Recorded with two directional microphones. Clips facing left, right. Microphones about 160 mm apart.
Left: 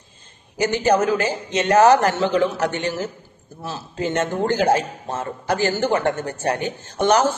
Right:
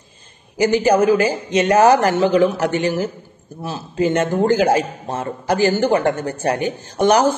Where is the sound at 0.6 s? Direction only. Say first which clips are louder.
Right 4 dB; 10° right (ahead or behind).